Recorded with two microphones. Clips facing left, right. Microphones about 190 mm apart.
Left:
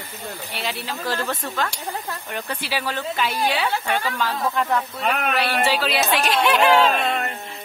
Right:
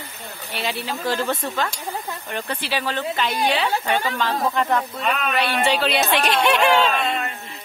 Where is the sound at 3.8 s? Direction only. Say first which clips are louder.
Right 2 dB; 20° right (ahead or behind).